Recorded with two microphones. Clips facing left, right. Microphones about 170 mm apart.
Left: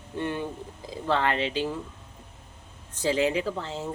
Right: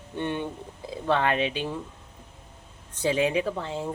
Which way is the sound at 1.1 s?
15° right (ahead or behind).